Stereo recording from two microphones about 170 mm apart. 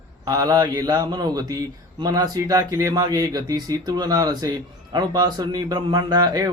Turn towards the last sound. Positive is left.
turn(degrees=-20)  # may be behind; listen again after turning